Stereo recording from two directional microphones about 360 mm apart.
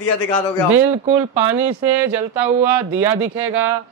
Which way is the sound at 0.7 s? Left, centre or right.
Centre.